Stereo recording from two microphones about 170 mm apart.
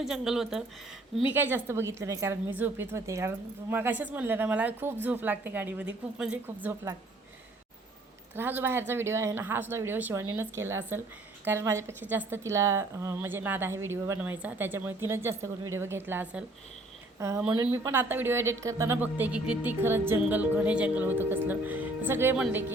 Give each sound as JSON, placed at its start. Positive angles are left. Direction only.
{"t": 0.0, "sound": "speech", "side_deg": 0}
{"t": 8.4, "sound": "speech", "side_deg": -10}